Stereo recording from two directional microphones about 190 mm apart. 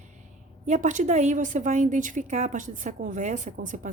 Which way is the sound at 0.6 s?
40° right (ahead or behind).